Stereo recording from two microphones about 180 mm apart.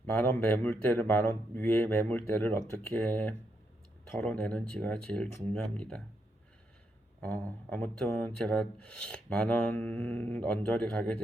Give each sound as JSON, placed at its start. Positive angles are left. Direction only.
{"t": 0.0, "sound": "speech", "side_deg": 10}
{"t": 7.2, "sound": "speech", "side_deg": 5}